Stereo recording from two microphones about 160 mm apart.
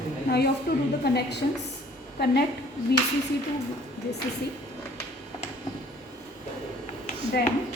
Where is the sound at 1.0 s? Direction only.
90° left.